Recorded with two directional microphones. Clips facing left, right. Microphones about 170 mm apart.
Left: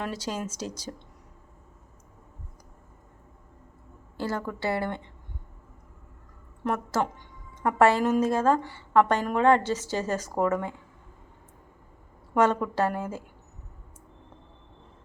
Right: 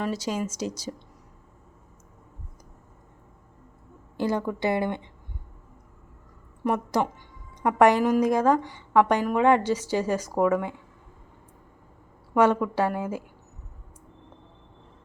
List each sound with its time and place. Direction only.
0.2 s a woman's voice: 10° right (ahead or behind)
4.2 s a woman's voice: 15° right (ahead or behind)
6.7 s a woman's voice: 15° right (ahead or behind)
12.3 s a woman's voice: 10° right (ahead or behind)